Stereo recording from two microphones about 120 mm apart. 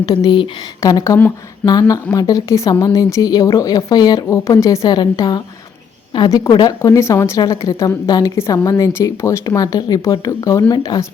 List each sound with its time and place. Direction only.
0.0 s a woman's voice: 35° left (ahead or behind)